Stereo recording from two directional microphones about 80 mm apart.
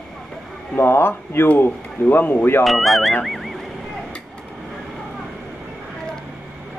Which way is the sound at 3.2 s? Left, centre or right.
Centre.